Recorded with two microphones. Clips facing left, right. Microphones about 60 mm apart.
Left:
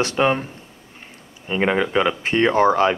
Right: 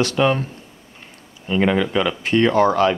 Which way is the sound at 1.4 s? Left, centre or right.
Left.